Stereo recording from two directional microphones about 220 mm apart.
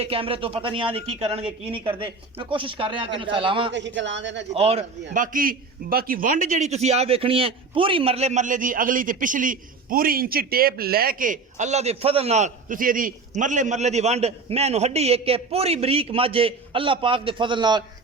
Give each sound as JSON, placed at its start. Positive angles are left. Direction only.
{"t": 0.0, "sound": "speech", "side_deg": -25}
{"t": 3.7, "sound": "speech", "side_deg": -55}
{"t": 4.5, "sound": "a man's voice", "side_deg": -30}